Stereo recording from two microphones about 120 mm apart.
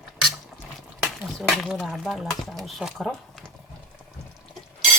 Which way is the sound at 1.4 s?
Centre (ahead or behind).